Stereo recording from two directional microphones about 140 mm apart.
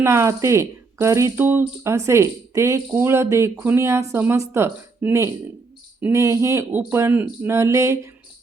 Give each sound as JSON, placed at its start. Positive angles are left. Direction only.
{"t": 0.0, "sound": "speech", "side_deg": -20}